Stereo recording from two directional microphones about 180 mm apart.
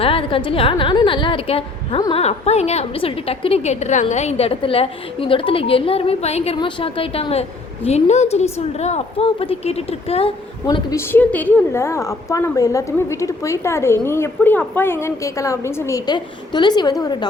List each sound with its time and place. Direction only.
0.0 s a woman's voice: 30° left (ahead or behind)